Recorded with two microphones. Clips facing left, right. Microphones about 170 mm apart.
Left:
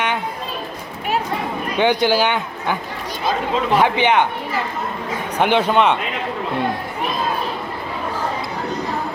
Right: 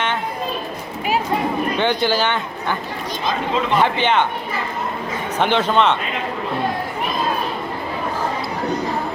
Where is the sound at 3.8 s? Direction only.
10° left (ahead or behind).